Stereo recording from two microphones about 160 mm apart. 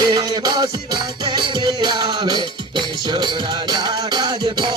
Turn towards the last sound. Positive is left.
turn(degrees=-25)  # may be behind; listen again after turning